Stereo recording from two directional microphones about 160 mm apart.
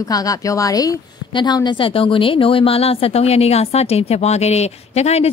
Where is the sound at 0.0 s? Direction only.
20° left (ahead or behind).